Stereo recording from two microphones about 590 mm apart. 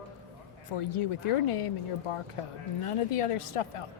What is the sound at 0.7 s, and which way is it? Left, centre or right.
A woman's voice, left.